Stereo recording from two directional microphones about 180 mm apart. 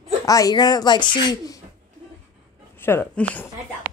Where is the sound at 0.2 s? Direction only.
20° left (ahead or behind).